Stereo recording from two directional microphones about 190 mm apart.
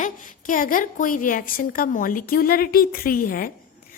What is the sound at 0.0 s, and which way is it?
A woman's voice, 45° left (ahead or behind).